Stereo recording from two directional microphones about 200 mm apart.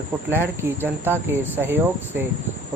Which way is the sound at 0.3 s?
10° right (ahead or behind).